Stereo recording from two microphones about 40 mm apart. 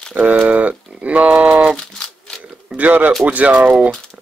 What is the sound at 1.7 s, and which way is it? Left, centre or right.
Tearing, centre.